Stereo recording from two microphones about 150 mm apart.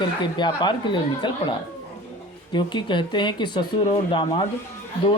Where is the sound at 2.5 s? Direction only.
30° left (ahead or behind).